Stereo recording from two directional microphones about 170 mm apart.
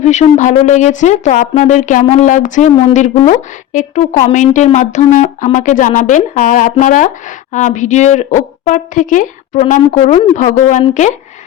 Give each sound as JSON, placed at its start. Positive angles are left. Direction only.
{"t": 0.0, "sound": "speech", "side_deg": 45}